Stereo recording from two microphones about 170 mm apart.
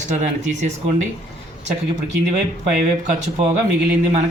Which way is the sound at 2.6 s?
40° right (ahead or behind).